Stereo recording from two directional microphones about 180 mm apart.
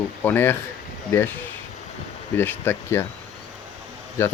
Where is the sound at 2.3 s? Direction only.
10° left (ahead or behind).